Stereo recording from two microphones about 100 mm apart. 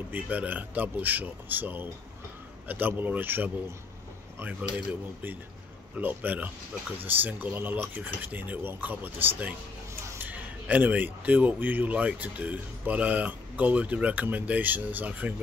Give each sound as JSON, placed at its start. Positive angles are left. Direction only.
{"t": 0.1, "sound": "speech", "side_deg": -15}